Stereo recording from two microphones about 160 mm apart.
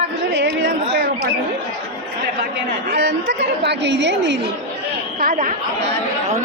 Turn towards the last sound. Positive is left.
turn(degrees=-60)  # may be behind; listen again after turning